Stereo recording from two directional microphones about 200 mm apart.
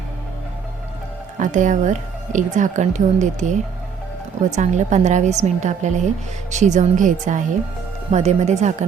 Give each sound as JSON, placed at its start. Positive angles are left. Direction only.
{"t": 1.4, "sound": "speech", "side_deg": -40}